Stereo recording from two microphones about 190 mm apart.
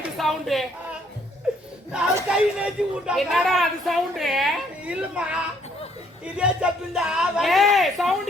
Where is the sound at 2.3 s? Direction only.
5° right (ahead or behind).